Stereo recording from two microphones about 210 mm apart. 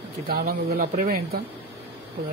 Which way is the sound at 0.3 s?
45° right (ahead or behind).